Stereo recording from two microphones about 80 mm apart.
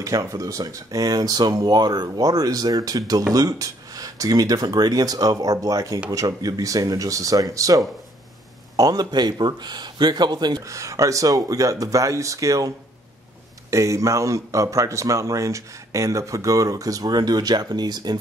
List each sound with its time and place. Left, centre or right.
0.0 s speech: right
10.6 s speech: right